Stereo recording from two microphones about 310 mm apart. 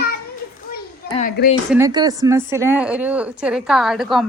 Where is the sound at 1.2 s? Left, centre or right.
Left.